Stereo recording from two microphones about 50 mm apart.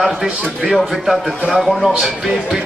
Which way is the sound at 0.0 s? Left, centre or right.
Centre.